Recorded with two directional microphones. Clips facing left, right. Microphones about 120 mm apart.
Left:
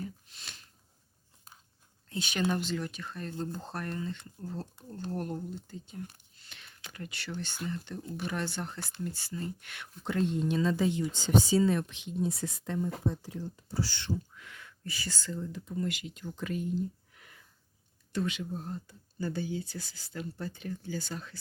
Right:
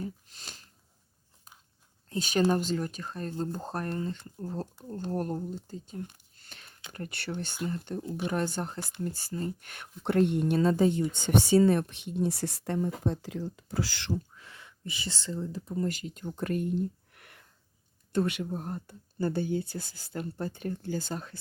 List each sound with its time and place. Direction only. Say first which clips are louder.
0.0 s sneeze: right 3 dB; 40° right (ahead or behind)
2.0 s speech: right 5 dB; 40° right (ahead or behind)
10.0 s speech: right 5 dB; 60° right (ahead or behind); by 11.0 s 45° right (ahead or behind)
11.2 s speech: right 3 dB; 60° right (ahead or behind)
12.1 s speech: right 3 dB; 75° right (ahead or behind); by 14.2 s 90° right
14.3 s speech: left 1 dB; 30° right (ahead or behind)